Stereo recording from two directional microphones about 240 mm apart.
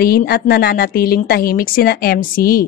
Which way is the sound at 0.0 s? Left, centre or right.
Left.